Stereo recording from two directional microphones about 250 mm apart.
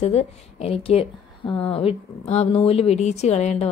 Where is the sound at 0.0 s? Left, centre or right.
Left.